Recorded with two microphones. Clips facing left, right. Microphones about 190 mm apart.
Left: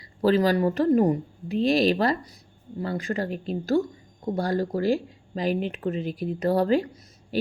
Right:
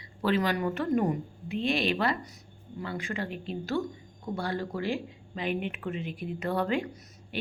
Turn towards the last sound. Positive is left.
turn(degrees=35)  # may be behind; listen again after turning